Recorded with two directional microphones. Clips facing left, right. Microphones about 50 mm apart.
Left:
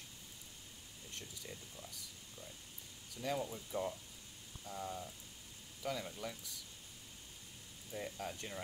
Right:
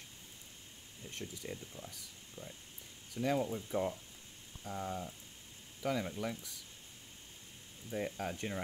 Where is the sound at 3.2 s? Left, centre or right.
Right.